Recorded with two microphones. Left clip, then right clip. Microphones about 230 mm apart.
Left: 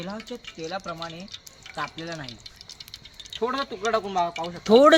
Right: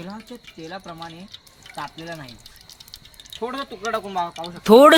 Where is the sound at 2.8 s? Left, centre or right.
Centre.